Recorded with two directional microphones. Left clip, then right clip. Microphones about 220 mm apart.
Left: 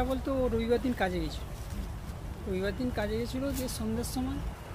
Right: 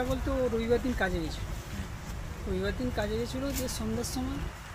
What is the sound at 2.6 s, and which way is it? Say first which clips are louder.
A woman's voice: right 1 dB; 25° left (ahead or behind).